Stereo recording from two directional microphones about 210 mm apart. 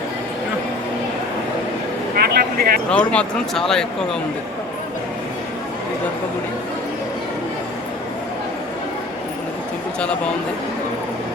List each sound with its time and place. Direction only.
2.1 s speech: 50° right (ahead or behind)
2.9 s speech: 5° left (ahead or behind)